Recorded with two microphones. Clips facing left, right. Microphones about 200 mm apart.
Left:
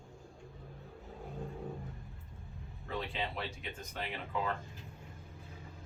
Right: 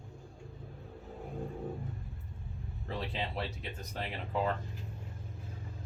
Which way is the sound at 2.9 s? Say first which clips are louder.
Right 1 dB; 35° right (ahead or behind).